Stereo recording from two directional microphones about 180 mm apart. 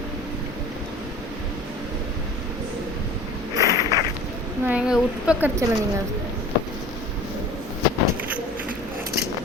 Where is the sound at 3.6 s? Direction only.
20° right (ahead or behind).